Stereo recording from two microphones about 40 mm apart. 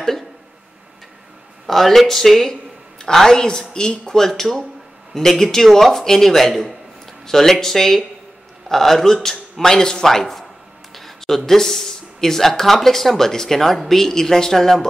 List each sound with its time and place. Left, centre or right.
1.7 s speech: centre; by 4.2 s left
4.2 s speech: centre